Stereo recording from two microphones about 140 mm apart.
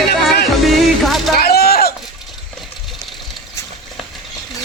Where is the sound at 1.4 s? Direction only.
90° left.